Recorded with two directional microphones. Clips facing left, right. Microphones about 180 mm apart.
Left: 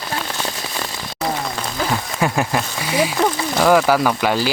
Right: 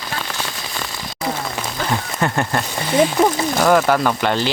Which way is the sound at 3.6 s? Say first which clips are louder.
Left 2 dB; 5° left (ahead or behind).